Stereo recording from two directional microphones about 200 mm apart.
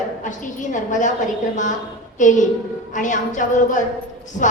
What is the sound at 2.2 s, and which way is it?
A woman's voice, 40° left (ahead or behind).